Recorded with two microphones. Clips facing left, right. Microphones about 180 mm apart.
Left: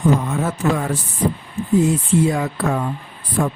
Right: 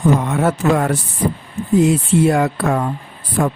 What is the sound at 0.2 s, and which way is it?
Speech, 75° right (ahead or behind).